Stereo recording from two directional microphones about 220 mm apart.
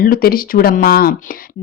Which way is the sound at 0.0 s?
40° left (ahead or behind).